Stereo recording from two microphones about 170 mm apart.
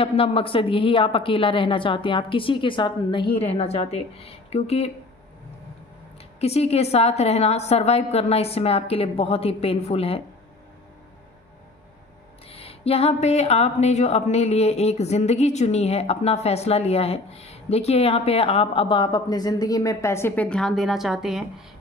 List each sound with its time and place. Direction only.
0.0 s speech: 35° left (ahead or behind)
6.4 s speech: 40° left (ahead or behind)
12.4 s speech: 35° left (ahead or behind); by 21.6 s centre (ahead or behind)